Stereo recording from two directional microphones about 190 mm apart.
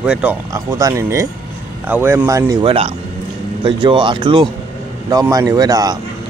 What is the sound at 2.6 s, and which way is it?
Speech, 30° right (ahead or behind).